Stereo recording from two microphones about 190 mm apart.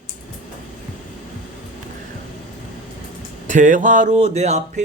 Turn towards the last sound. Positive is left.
turn(degrees=-35)  # may be behind; listen again after turning